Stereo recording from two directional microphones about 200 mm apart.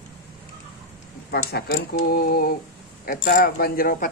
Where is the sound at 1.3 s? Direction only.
50° left (ahead or behind).